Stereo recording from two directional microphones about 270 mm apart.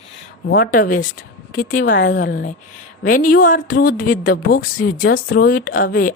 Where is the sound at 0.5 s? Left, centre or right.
Left.